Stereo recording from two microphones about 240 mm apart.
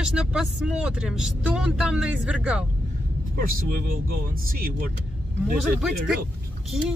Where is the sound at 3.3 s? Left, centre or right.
Right.